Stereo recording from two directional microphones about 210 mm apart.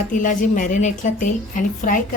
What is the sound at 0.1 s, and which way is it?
A woman's voice, 40° left (ahead or behind).